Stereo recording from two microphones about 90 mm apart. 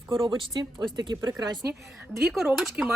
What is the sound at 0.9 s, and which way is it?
Speech, 55° right (ahead or behind).